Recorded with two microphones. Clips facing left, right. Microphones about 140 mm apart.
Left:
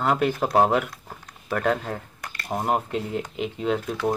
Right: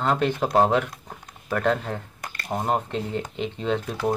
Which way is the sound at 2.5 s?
5° left (ahead or behind).